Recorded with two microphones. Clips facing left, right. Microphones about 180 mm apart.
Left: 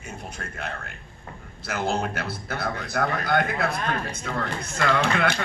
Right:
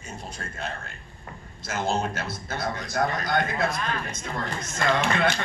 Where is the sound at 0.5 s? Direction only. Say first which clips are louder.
Right 1 dB; 65° left (ahead or behind).